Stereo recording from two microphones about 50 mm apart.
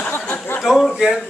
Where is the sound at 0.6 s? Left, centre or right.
Centre.